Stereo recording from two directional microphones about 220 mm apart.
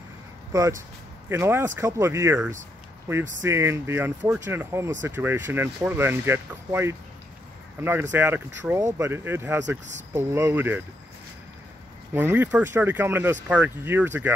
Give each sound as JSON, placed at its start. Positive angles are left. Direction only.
{"t": 0.5, "sound": "speech", "side_deg": -15}
{"t": 12.1, "sound": "speech", "side_deg": -10}